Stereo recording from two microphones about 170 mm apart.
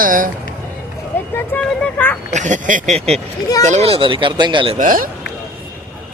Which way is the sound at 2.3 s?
45° right (ahead or behind).